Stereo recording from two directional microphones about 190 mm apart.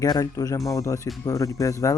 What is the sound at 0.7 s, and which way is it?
Music, 15° left (ahead or behind).